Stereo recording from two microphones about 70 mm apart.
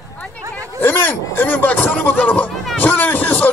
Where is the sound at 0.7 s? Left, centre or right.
Left.